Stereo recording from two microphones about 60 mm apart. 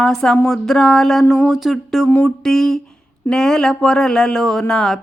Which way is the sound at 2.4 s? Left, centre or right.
Centre.